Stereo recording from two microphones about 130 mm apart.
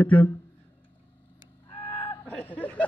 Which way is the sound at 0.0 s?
10° left (ahead or behind).